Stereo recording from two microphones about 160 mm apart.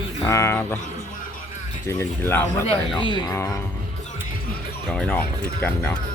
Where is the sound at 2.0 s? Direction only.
15° left (ahead or behind).